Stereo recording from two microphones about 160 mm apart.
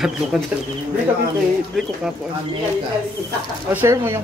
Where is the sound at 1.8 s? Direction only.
Centre (ahead or behind).